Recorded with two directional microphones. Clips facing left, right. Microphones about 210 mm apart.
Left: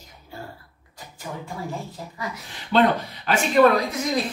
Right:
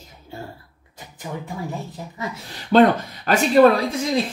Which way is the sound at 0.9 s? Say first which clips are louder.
Right 3 dB; 20° right (ahead or behind).